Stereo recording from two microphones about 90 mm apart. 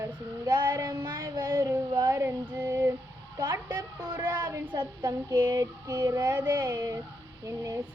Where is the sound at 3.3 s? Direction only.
45° right (ahead or behind).